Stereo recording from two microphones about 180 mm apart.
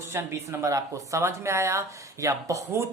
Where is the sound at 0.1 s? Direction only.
15° right (ahead or behind).